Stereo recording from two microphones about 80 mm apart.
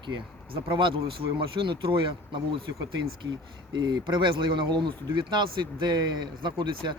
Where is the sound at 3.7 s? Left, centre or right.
Right.